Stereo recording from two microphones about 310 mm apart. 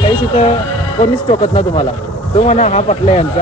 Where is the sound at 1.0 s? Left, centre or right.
Left.